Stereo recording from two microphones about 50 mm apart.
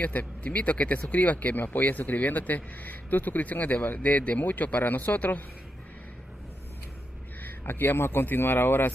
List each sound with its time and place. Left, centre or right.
0.0 s speech: left
7.4 s speech: left